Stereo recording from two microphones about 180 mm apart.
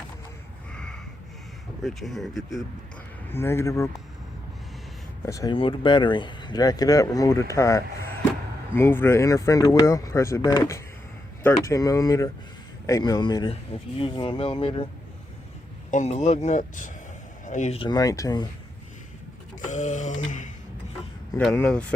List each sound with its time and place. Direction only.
0.7 s a sound: 5° left (ahead or behind)
1.8 s speech: centre (ahead or behind)
3.3 s speech: 15° left (ahead or behind)
5.2 s speech: 20° left (ahead or behind)
15.9 s speech: 40° left (ahead or behind); by 18.4 s 20° left (ahead or behind)
19.6 s a sound: 40° left (ahead or behind)
21.3 s speech: 10° left (ahead or behind)